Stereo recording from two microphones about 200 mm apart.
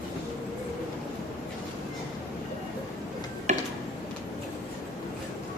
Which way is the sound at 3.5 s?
35° right (ahead or behind).